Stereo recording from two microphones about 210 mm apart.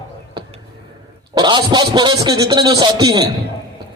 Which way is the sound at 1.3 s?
20° right (ahead or behind).